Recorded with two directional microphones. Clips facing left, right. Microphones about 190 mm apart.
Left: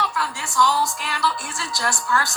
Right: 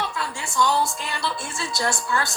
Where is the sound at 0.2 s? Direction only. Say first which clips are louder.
Left 2 dB; 20° right (ahead or behind).